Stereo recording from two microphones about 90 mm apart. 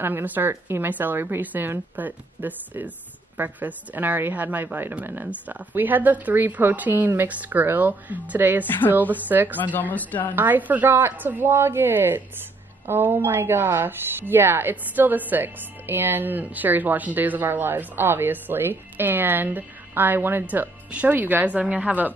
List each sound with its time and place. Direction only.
0.0 s a woman's voice: 20° right (ahead or behind)
8.6 s speech: 20° left (ahead or behind)
8.9 s a woman's voice: 20° right (ahead or behind)
9.6 s speech: 20° left (ahead or behind)
10.3 s a woman's voice: 20° right (ahead or behind)